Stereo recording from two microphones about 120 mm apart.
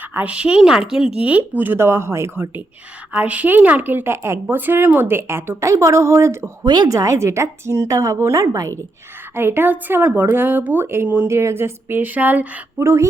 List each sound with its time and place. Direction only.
0.1 s a woman's voice: 10° right (ahead or behind)